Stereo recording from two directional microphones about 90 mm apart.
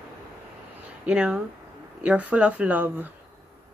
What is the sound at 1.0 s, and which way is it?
Speech, 10° right (ahead or behind).